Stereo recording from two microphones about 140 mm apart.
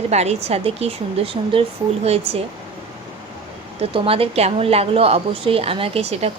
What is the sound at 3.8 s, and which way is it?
A woman's voice, 40° right (ahead or behind).